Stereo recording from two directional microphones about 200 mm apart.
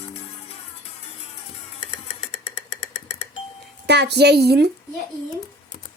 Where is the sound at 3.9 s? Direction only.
55° right (ahead or behind).